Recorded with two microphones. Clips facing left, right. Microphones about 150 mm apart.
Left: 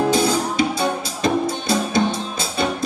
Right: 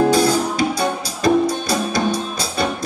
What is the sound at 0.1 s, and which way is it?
Music, 20° left (ahead or behind).